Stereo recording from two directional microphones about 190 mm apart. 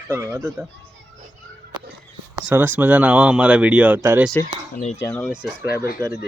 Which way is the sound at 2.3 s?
10° right (ahead or behind).